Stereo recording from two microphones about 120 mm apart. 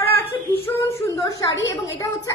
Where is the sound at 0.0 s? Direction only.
15° left (ahead or behind).